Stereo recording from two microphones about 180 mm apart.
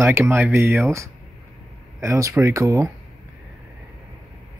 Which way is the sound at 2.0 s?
15° right (ahead or behind).